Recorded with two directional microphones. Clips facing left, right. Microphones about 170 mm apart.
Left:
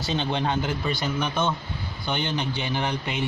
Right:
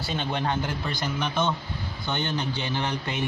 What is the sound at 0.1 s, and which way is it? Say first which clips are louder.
Speech: left 2 dB; 20° left (ahead or behind).